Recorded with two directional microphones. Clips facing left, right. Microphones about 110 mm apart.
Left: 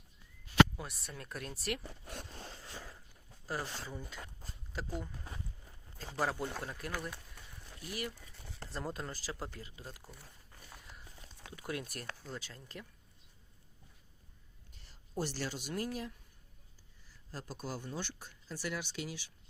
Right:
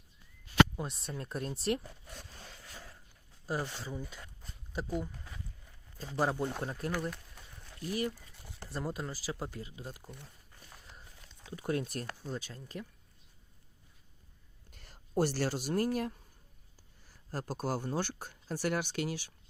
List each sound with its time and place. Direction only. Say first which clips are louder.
0.8 s speech: right 6 dB; 25° right (ahead or behind)
2.6 s a sound: left 2 dB; 20° left (ahead or behind)
3.4 s speech: right 4 dB; 15° right (ahead or behind)
6.0 s speech: right 4 dB; 20° right (ahead or behind)
8.7 s speech: right 3 dB; 15° right (ahead or behind)
11.5 s speech: right 7 dB; 30° right (ahead or behind)
14.7 s speech: right 9 dB; 55° right (ahead or behind)
17.3 s speech: right 7 dB; 45° right (ahead or behind)